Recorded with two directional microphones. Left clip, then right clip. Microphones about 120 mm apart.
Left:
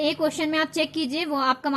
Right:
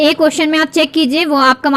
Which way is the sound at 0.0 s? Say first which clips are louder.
Right 13 dB; 30° right (ahead or behind).